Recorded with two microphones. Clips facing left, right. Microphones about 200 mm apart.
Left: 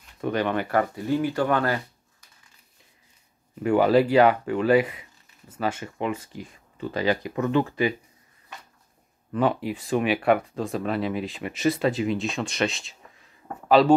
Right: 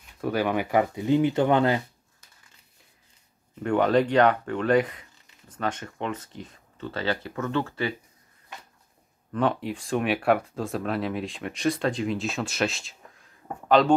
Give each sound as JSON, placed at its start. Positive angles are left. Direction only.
{"t": 0.2, "sound": "speech", "side_deg": -5}
{"t": 3.6, "sound": "speech", "side_deg": 5}
{"t": 9.3, "sound": "speech", "side_deg": 5}